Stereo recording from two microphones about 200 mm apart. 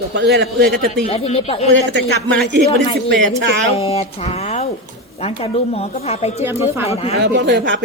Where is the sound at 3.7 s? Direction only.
30° left (ahead or behind).